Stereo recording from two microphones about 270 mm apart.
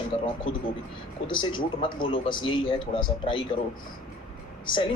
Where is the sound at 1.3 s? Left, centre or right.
Centre.